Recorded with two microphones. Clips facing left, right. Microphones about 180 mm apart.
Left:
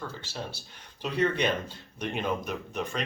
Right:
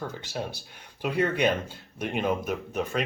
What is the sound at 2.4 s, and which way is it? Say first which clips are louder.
Speech: right 4 dB; 5° right (ahead or behind).